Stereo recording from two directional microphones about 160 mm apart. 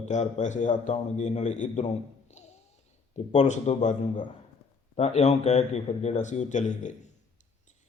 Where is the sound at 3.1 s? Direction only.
45° left (ahead or behind).